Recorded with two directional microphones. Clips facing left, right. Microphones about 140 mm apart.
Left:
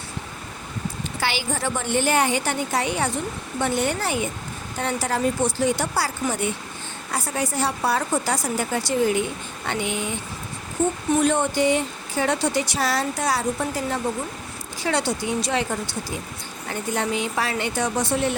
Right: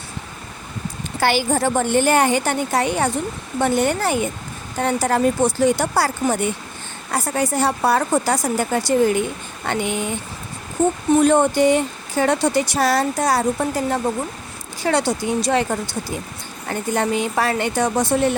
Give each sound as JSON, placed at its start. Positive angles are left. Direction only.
{"t": 1.2, "sound": "speech", "side_deg": -50}
{"t": 11.2, "sound": "speech", "side_deg": -45}